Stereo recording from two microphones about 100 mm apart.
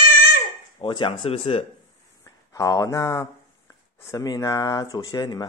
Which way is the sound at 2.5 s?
35° left (ahead or behind).